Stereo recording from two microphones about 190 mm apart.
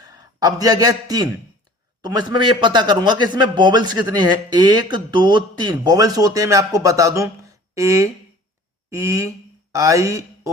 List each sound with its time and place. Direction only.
0.0 s a man's voice: 20° right (ahead or behind)